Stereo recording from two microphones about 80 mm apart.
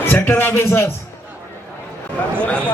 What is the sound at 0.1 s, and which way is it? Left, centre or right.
Speech, left.